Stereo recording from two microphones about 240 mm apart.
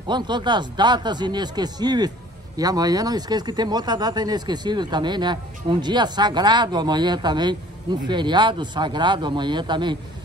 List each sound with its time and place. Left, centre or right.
0.0 s speech: centre